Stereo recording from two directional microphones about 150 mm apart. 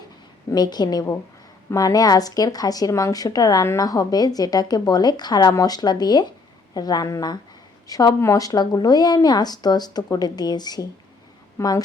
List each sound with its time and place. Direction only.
0.5 s speech: 30° left (ahead or behind)